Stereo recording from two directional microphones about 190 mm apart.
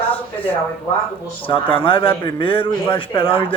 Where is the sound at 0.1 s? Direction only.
30° left (ahead or behind).